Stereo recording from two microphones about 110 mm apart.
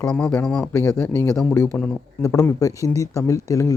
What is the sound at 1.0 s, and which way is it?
Speech, 25° left (ahead or behind).